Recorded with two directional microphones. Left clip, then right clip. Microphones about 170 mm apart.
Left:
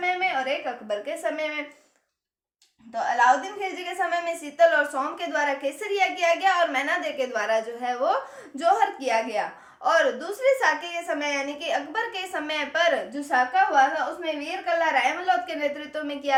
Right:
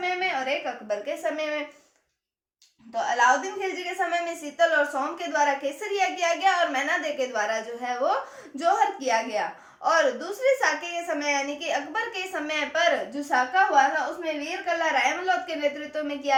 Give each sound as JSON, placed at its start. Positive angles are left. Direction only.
{"t": 0.0, "sound": "a sound", "side_deg": 25}
{"t": 2.9, "sound": "a woman's voice", "side_deg": 25}
{"t": 4.1, "sound": "a child's voice", "side_deg": 40}